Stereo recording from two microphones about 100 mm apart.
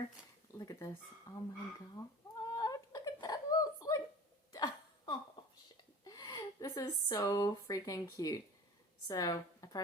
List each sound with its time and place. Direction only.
0.6 s dog: 40° left (ahead or behind)
1.3 s speech: 35° left (ahead or behind)
2.0 s a sound: 35° left (ahead or behind)
4.5 s hiccup: 40° left (ahead or behind)
6.1 s a woman's voice: 40° left (ahead or behind)